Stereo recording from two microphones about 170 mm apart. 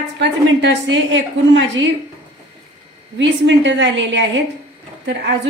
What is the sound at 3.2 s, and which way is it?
A woman's voice, 90° right.